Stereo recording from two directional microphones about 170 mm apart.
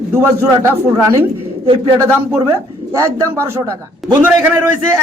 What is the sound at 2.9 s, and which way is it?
A man's voice, 15° right (ahead or behind).